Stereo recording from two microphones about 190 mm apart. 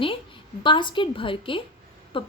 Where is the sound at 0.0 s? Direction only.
25° left (ahead or behind).